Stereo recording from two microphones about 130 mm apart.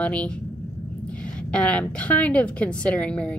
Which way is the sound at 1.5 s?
10° left (ahead or behind).